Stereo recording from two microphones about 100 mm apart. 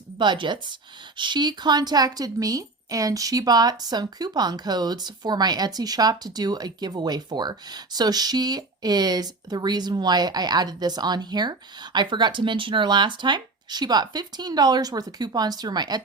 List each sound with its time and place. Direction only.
0.2 s speech: 50° right (ahead or behind)